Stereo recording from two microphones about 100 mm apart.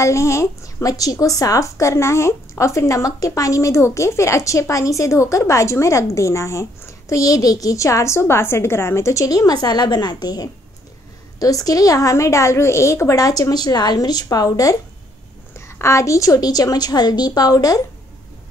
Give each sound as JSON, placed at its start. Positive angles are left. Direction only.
{"t": 0.0, "sound": "a woman's voice", "side_deg": 30}